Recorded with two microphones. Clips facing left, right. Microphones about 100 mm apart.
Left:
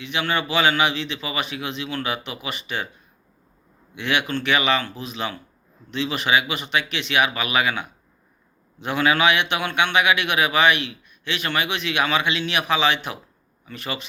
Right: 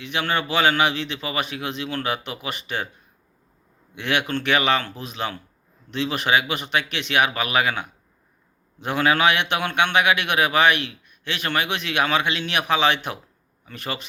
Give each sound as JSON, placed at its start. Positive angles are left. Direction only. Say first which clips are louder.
{"t": 0.0, "sound": "a man's voice", "louder": "even", "side_deg": -50}
{"t": 3.9, "sound": "a man's voice", "louder": "even", "side_deg": -50}